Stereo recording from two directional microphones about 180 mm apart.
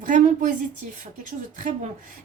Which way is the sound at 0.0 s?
45° right (ahead or behind).